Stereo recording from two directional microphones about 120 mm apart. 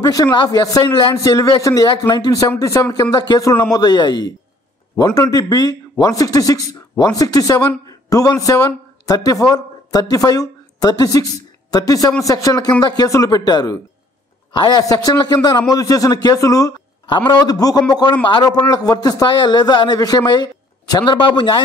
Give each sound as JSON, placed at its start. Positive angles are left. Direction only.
{"t": 0.0, "sound": "a man's voice", "side_deg": 30}
{"t": 2.4, "sound": "a man's voice", "side_deg": 25}